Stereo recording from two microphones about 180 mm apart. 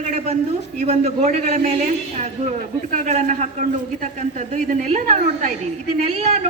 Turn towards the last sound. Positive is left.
turn(degrees=-35)  # may be behind; listen again after turning